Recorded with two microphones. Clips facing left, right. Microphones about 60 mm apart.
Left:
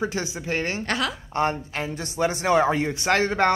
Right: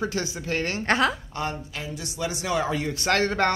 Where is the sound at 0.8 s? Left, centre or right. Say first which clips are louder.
Right 4 dB; right.